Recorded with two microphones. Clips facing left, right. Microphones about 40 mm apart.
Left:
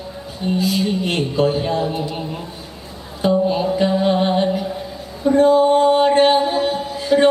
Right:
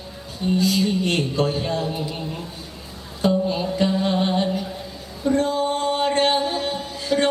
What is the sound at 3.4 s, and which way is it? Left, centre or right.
Music, centre.